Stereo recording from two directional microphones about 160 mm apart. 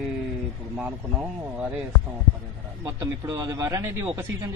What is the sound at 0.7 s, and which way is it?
Speech, 10° right (ahead or behind).